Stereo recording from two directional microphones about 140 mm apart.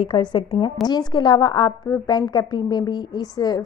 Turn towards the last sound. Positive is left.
turn(degrees=30)  # may be behind; listen again after turning